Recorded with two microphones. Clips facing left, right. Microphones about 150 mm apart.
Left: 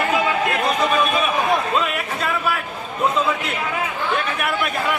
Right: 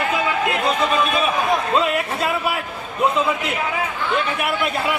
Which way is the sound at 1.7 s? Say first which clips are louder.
Right 3 dB; 25° right (ahead or behind).